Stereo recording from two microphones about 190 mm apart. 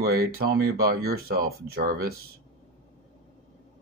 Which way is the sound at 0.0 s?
55° right (ahead or behind).